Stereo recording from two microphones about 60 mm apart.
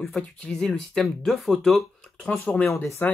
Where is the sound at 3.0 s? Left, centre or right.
Left.